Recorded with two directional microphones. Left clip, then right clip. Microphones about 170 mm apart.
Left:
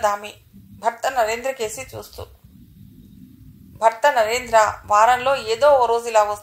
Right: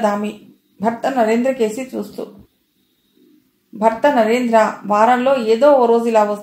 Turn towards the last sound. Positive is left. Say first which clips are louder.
# right 4 dB
turn(degrees=45)  # may be behind; listen again after turning